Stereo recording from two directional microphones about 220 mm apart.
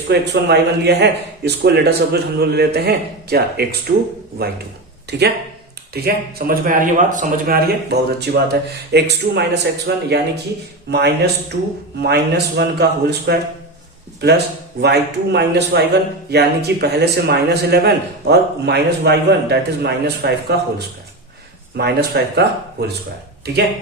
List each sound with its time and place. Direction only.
0.1 s a man's voice: 50° right (ahead or behind)
5.1 s a man's voice: 50° right (ahead or behind)